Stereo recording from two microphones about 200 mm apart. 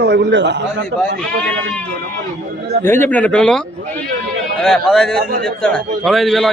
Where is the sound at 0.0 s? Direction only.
60° right (ahead or behind).